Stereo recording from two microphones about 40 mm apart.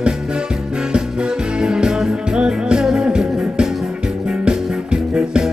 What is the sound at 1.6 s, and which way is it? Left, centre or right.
Music, right.